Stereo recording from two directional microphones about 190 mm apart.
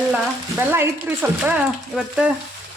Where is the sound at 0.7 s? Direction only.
10° right (ahead or behind).